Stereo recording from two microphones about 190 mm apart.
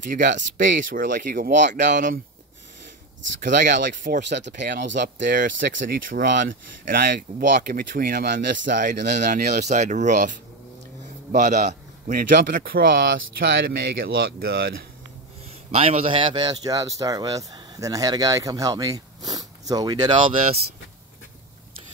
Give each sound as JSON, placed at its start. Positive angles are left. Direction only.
{"t": 0.1, "sound": "a man's voice", "side_deg": -45}
{"t": 3.6, "sound": "a man's voice", "side_deg": -45}
{"t": 4.2, "sound": "speech", "side_deg": -65}
{"t": 5.3, "sound": "a man's voice", "side_deg": -50}
{"t": 11.3, "sound": "a man's voice", "side_deg": -40}
{"t": 15.7, "sound": "speech", "side_deg": -35}